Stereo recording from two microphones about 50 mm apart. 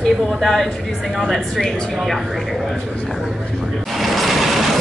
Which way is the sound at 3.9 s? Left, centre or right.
Centre.